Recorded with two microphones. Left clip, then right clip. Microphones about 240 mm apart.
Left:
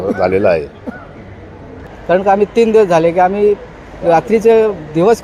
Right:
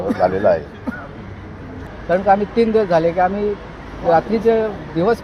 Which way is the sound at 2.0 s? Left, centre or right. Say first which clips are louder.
Left 4 dB; left.